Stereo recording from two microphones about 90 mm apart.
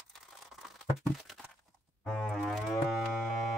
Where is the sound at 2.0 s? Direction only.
10° left (ahead or behind).